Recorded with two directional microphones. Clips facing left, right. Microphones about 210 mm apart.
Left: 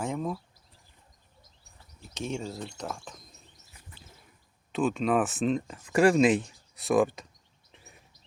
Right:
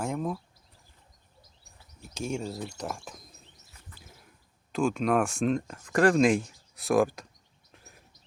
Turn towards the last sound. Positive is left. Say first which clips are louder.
# even
turn(degrees=0)  # may be behind; listen again after turning